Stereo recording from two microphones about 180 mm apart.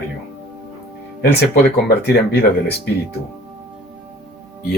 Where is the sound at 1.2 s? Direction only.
60° left (ahead or behind).